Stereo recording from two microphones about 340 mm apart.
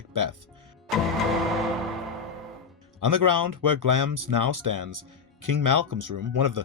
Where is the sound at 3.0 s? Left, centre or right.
Right.